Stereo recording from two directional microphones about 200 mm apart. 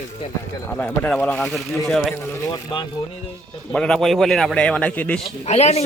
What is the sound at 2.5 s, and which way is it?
Speech, 25° left (ahead or behind).